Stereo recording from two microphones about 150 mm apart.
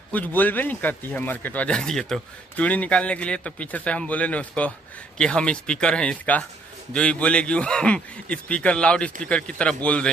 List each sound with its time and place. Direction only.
0.1 s speech: 10° left (ahead or behind)